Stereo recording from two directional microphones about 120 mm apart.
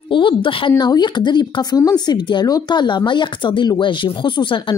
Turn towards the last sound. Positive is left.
turn(degrees=45)  # may be behind; listen again after turning